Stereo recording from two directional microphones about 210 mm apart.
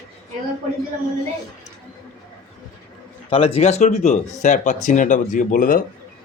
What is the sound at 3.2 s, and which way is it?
Speech, 25° left (ahead or behind).